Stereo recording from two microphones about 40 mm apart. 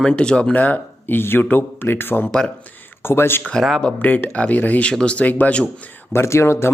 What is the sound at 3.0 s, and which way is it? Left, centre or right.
Speech, left.